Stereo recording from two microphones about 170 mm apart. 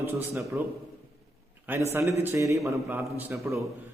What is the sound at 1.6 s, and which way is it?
A man's voice, 15° right (ahead or behind).